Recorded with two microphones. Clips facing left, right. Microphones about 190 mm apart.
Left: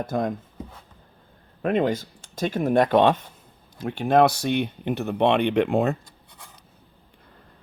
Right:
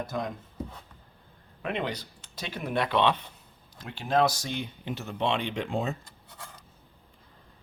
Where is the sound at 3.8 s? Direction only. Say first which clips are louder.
Left 7 dB; 55° left (ahead or behind).